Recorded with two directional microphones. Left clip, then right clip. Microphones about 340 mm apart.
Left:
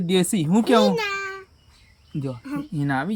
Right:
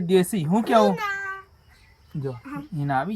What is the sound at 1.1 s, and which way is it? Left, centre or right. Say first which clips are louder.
Meow: left 1 dB; left.